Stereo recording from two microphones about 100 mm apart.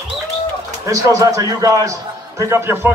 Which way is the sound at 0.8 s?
35° right (ahead or behind).